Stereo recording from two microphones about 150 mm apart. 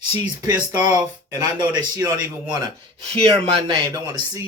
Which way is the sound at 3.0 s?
40° right (ahead or behind).